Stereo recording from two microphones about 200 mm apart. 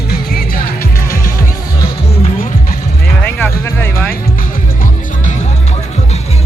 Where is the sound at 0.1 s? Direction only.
50° left (ahead or behind).